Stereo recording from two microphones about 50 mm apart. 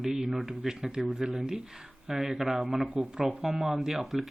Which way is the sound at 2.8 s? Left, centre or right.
Right.